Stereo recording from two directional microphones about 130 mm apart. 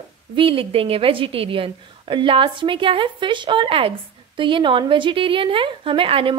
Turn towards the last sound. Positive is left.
turn(degrees=-45)  # may be behind; listen again after turning